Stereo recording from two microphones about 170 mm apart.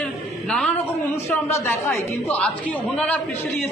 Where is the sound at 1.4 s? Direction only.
15° left (ahead or behind).